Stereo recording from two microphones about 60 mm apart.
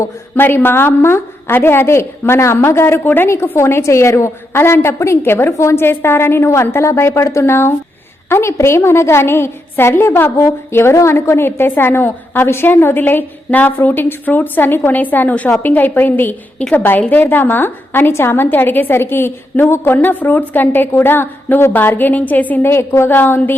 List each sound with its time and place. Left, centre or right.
0.3 s a woman's voice: left
3.2 s a woman's voice: left
5.8 s a woman's voice: left
10.3 s a woman's voice: left
22.6 s a woman's voice: left